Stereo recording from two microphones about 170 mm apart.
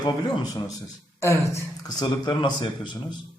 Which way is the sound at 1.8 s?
25° left (ahead or behind).